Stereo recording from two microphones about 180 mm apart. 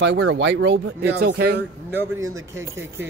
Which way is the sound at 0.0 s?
85° right.